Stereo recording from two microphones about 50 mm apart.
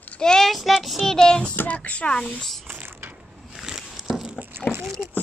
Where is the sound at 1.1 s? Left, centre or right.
Centre.